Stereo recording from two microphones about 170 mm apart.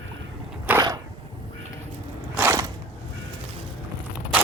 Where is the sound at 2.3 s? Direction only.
15° right (ahead or behind).